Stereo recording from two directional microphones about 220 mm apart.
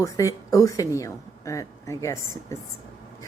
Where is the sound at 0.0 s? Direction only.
15° left (ahead or behind).